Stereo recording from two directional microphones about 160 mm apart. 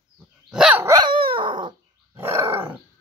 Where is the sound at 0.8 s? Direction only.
25° right (ahead or behind).